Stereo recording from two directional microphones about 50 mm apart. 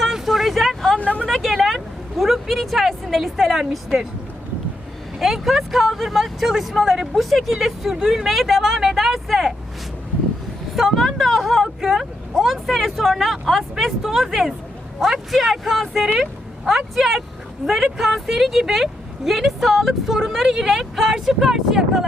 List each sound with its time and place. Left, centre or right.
0.0 s a sound: centre
0.9 s vehicle: left
1.3 s vehicle: centre
5.2 s speech: centre
10.8 s speech: centre